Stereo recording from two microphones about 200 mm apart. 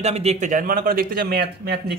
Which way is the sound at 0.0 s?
30° right (ahead or behind).